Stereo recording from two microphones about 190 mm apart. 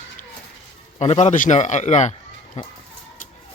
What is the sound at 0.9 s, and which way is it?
A man's voice, 35° left (ahead or behind).